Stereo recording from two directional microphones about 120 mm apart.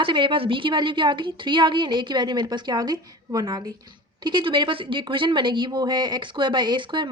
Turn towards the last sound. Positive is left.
turn(degrees=-40)  # may be behind; listen again after turning